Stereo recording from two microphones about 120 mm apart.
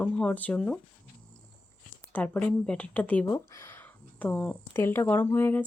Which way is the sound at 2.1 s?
15° left (ahead or behind).